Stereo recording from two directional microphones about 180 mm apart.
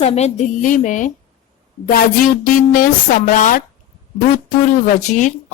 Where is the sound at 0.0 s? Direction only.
35° left (ahead or behind).